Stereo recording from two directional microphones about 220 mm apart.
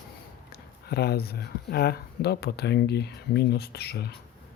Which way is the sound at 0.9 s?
45° left (ahead or behind).